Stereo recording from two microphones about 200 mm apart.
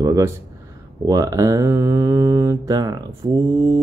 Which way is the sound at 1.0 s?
15° right (ahead or behind).